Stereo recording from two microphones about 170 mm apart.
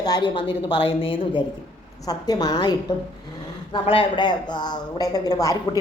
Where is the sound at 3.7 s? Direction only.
30° left (ahead or behind).